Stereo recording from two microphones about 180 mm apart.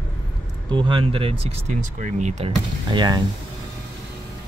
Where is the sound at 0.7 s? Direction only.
25° right (ahead or behind).